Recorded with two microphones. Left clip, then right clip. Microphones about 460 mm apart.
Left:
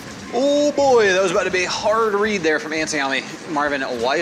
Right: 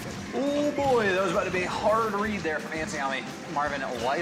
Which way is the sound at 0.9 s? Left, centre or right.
Left.